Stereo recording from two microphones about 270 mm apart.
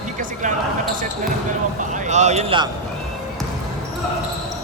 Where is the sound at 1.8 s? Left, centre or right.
Right.